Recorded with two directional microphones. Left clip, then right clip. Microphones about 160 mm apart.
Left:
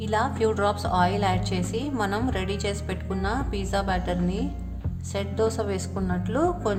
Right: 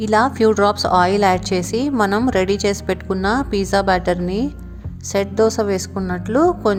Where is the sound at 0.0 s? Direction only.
40° right (ahead or behind).